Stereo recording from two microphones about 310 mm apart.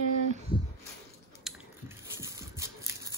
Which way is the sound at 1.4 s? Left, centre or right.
Centre.